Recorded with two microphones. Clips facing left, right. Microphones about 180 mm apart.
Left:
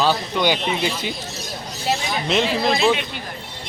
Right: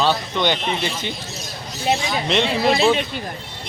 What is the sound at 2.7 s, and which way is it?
Speech, 35° right (ahead or behind).